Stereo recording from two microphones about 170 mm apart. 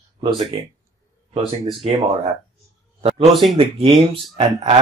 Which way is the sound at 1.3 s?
30° right (ahead or behind).